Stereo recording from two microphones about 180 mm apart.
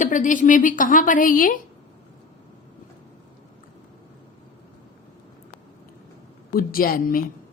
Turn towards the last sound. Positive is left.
turn(degrees=50)  # may be behind; listen again after turning